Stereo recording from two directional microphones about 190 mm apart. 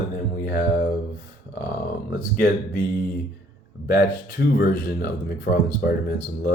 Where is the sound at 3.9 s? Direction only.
55° left (ahead or behind).